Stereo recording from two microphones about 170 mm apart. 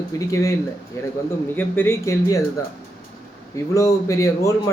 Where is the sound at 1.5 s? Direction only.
15° left (ahead or behind).